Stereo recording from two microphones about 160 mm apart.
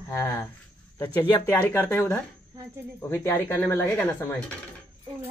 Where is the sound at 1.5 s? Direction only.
10° left (ahead or behind).